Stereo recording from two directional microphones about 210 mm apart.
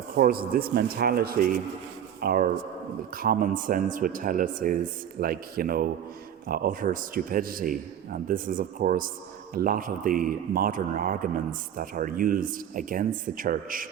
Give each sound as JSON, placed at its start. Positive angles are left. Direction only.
{"t": 0.2, "sound": "a man's voice", "side_deg": -45}